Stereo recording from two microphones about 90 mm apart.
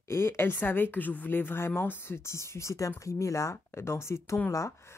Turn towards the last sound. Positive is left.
turn(degrees=35)  # may be behind; listen again after turning